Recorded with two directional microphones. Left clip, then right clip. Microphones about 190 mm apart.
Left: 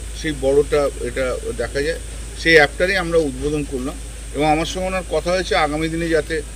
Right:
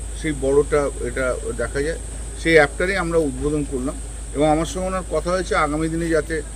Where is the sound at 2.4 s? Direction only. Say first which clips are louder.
Left 2 dB; 5° right (ahead or behind).